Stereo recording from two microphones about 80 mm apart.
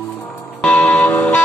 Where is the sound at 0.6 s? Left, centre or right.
Centre.